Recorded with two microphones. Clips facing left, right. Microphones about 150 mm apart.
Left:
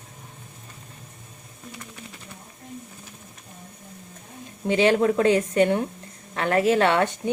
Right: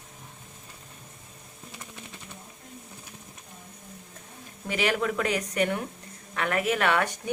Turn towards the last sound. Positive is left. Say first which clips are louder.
# left 6 dB
turn(degrees=25)  # may be behind; listen again after turning